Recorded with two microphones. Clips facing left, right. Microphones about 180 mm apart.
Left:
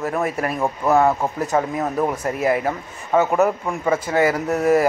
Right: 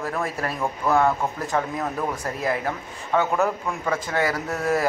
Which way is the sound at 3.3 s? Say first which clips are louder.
Left 5 dB; 20° left (ahead or behind).